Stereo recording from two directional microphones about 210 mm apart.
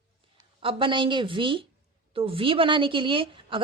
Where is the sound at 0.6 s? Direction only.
25° right (ahead or behind).